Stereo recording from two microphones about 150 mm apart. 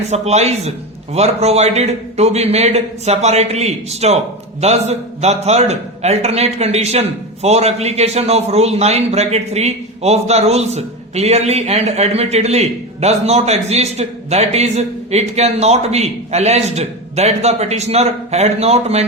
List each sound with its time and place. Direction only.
0.1 s a man's voice: 45° right (ahead or behind)